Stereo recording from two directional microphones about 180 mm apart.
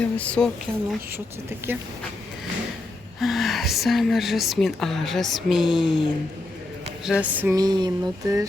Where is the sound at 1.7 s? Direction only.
10° right (ahead or behind).